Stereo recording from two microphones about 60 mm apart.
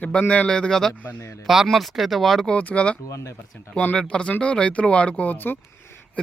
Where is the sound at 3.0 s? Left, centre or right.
Left.